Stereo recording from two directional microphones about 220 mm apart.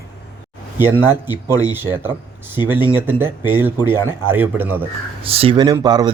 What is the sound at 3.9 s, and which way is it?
Speech, 15° left (ahead or behind).